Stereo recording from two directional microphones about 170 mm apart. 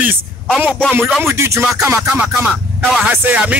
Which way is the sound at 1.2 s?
15° right (ahead or behind).